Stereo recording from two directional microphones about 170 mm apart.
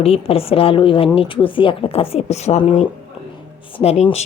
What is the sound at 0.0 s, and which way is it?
A woman's voice, 35° left (ahead or behind).